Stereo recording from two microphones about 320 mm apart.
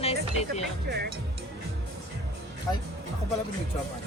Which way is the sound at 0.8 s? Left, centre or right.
Right.